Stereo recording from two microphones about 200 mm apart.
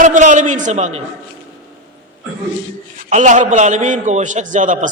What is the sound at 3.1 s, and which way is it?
A man's voice, 35° right (ahead or behind).